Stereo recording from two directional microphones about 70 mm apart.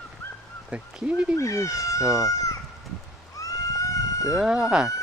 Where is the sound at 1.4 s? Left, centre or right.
Left.